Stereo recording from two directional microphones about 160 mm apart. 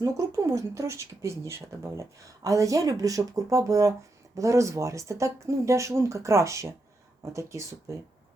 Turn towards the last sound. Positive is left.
turn(degrees=-20)  # may be behind; listen again after turning